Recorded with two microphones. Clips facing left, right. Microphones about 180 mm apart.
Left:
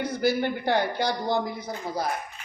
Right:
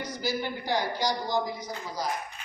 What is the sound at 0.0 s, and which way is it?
Speech, 60° left (ahead or behind).